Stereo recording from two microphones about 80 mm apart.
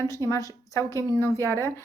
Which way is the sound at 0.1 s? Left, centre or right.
Left.